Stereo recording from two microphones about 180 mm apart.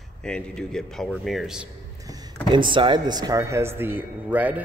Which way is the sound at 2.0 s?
20° right (ahead or behind).